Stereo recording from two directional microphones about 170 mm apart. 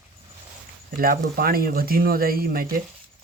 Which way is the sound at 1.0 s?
60° right (ahead or behind).